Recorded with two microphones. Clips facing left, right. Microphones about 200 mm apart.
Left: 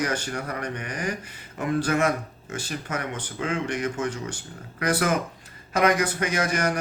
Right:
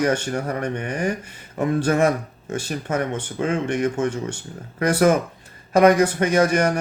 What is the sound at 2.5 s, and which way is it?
Speech, 25° right (ahead or behind).